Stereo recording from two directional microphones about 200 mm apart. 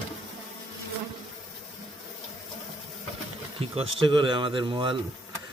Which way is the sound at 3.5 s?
30° right (ahead or behind).